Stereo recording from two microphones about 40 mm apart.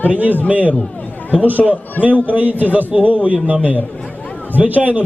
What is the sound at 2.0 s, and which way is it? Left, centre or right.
Speech, right.